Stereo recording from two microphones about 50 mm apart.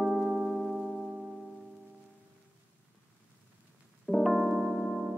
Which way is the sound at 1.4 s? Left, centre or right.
Centre.